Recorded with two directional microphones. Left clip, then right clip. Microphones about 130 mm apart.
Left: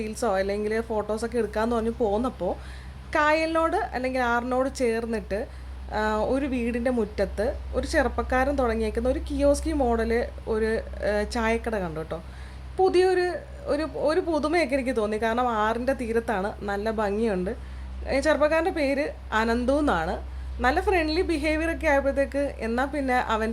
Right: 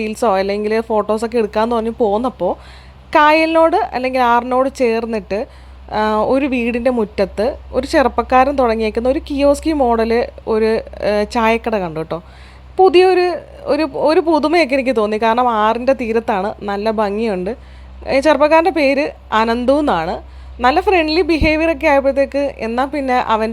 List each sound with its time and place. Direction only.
0.0 s a man's voice: 40° right (ahead or behind)
3.1 s a man's voice: 40° right (ahead or behind)